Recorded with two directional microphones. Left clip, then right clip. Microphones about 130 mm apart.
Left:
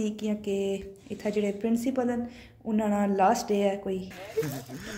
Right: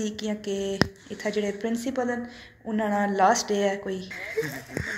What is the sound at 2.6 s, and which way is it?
Speech, 15° left (ahead or behind).